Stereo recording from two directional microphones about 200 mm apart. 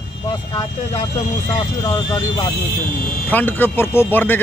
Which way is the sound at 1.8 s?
20° left (ahead or behind).